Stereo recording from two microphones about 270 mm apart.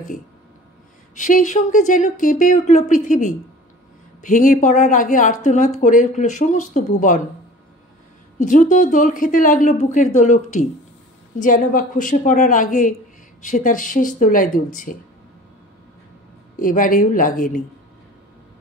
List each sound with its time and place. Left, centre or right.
1.1 s speech: left
8.4 s speech: left
16.5 s speech: left